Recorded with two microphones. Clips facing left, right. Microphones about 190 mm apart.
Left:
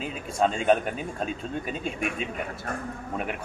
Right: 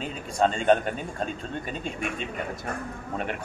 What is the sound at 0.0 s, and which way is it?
Speech, 5° left (ahead or behind).